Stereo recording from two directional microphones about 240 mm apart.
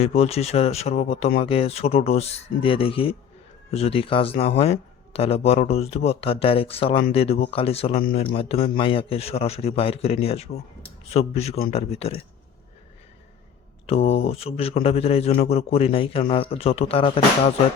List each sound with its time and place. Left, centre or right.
0.0 s speech: left
13.8 s speech: left